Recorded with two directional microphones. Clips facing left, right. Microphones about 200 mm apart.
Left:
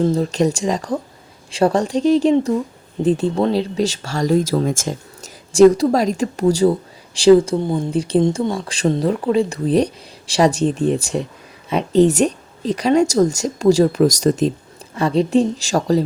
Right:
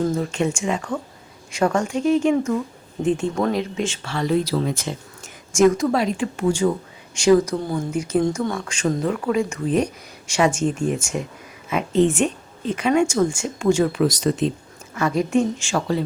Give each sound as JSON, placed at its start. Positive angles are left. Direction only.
{"t": 0.0, "sound": "speech", "side_deg": 35}
{"t": 7.9, "sound": "speech", "side_deg": 30}
{"t": 14.9, "sound": "speech", "side_deg": 30}